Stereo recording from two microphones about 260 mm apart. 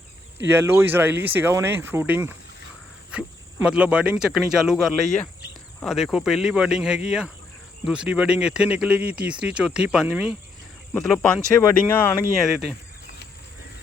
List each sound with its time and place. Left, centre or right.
0.5 s speech: centre